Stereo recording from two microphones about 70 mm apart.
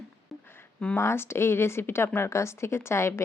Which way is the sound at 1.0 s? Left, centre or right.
Left.